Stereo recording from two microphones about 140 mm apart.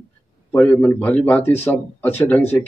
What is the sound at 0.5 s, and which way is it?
Speech, 15° left (ahead or behind).